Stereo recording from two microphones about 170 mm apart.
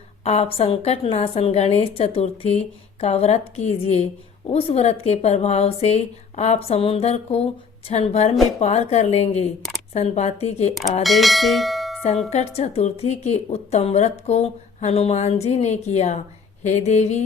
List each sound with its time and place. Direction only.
0.3 s a woman's voice: 35° left (ahead or behind)
11.0 s speech: centre (ahead or behind)
12.3 s a woman's voice: 40° left (ahead or behind)